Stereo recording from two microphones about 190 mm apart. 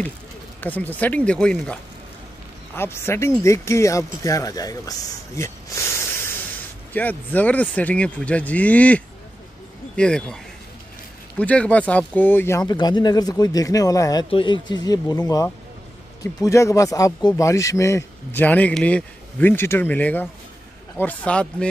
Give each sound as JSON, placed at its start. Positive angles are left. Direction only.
{"t": 0.6, "sound": "speech", "side_deg": 10}